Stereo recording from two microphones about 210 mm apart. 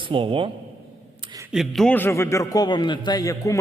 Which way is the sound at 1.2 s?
20° right (ahead or behind).